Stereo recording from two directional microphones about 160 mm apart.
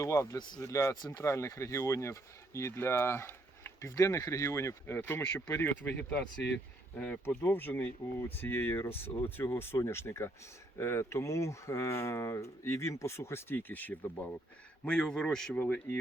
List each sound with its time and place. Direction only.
0.0 s a man's voice: 20° left (ahead or behind)